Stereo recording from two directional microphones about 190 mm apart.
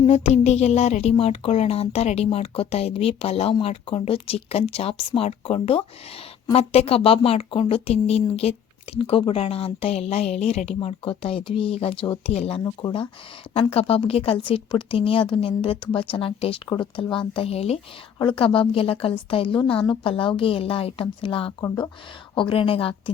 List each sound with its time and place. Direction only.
0.0 s speech: 35° left (ahead or behind)